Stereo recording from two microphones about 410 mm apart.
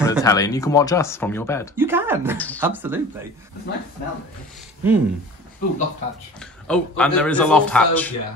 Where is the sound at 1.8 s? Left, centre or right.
Centre.